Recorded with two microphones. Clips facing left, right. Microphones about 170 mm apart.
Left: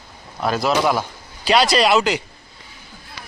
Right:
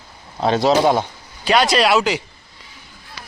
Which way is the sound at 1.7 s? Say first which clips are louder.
Even; centre (ahead or behind).